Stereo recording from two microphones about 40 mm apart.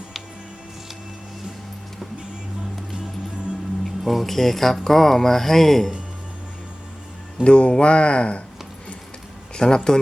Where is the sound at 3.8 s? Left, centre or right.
Centre.